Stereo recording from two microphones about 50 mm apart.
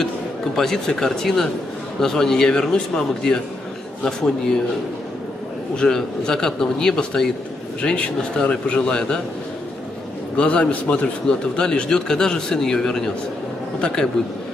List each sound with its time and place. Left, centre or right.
0.6 s speech: centre
5.8 s speech: centre
10.3 s a man's voice: left